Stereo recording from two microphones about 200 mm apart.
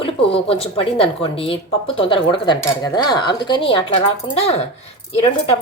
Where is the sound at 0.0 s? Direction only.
30° left (ahead or behind).